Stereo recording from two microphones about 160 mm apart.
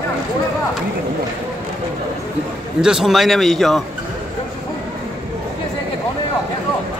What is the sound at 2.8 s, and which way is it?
A man's voice, 5° right (ahead or behind).